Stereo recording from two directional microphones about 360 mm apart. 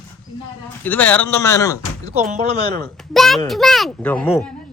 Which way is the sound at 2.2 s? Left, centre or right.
Centre.